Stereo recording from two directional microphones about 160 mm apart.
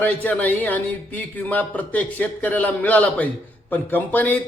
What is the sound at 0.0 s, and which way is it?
A man's voice, 10° left (ahead or behind).